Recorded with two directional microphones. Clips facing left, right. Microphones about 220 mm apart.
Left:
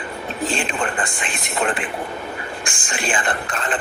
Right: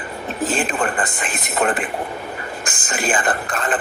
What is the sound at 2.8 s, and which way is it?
Speech, 40° right (ahead or behind).